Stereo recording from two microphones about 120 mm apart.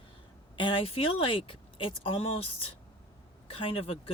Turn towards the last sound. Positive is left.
turn(degrees=50)  # may be behind; listen again after turning